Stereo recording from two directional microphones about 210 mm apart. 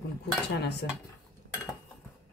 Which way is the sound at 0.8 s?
55° left (ahead or behind).